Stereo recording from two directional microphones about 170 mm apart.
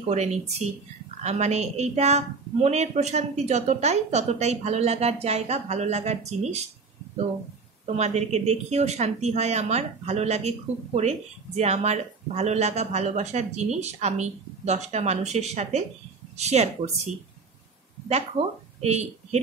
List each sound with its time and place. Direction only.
0.1 s a woman's voice: 40° right (ahead or behind)
7.8 s a woman's voice: 40° right (ahead or behind)